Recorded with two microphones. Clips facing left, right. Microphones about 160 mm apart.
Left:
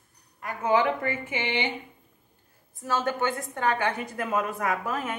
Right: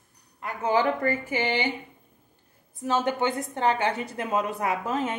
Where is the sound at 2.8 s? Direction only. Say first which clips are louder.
Right 2 dB; 20° right (ahead or behind).